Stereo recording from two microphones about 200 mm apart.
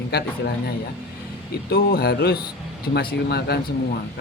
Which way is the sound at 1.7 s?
50° left (ahead or behind).